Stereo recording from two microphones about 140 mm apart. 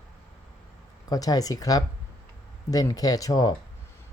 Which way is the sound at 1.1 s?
25° left (ahead or behind).